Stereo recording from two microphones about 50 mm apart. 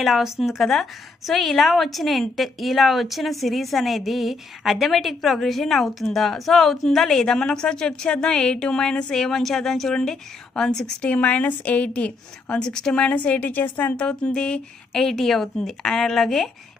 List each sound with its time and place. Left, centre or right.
0.0 s a woman's voice: centre
11.0 s a woman's voice: left
12.6 s a woman's voice: centre
13.1 s a woman's voice: left
13.9 s a woman's voice: left